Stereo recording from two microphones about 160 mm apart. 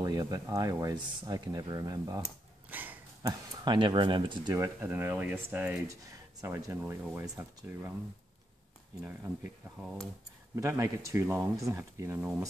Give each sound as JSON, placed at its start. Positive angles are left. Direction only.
{"t": 0.0, "sound": "speech", "side_deg": -25}
{"t": 2.2, "sound": "a sound", "side_deg": -10}
{"t": 3.2, "sound": "speech", "side_deg": -25}
{"t": 4.6, "sound": "speech", "side_deg": -10}
{"t": 9.0, "sound": "speech", "side_deg": -10}